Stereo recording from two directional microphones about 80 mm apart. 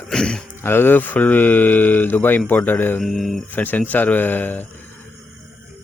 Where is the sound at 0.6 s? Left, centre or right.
Left.